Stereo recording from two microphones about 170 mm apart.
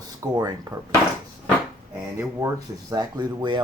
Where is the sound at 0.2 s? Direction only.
20° right (ahead or behind).